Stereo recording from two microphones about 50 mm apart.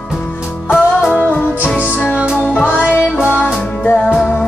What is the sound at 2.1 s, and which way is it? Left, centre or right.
Music, right.